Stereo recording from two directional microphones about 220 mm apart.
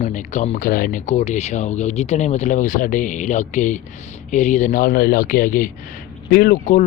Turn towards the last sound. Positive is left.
turn(degrees=40)  # may be behind; listen again after turning